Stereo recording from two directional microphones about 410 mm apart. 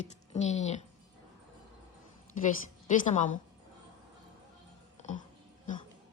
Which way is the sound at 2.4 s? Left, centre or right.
Centre.